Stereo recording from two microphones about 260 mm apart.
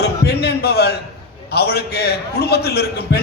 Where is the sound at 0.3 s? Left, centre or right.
Left.